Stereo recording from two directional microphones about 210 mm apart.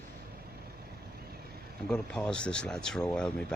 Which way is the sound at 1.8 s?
5° left (ahead or behind).